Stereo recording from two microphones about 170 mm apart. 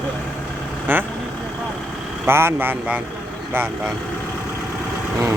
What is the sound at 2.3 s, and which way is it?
Speech, 15° right (ahead or behind).